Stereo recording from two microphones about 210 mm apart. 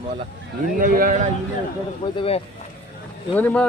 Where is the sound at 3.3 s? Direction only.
10° left (ahead or behind).